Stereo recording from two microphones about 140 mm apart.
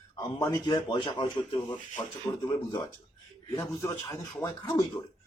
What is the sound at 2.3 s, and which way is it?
Speech, 20° left (ahead or behind).